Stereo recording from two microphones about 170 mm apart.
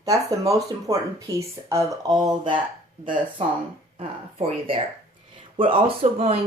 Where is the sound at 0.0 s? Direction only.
20° right (ahead or behind).